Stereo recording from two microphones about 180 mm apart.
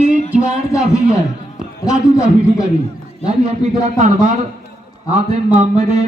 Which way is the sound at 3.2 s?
40° right (ahead or behind).